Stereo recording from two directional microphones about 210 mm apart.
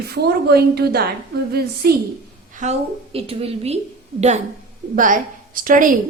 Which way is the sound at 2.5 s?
35° right (ahead or behind).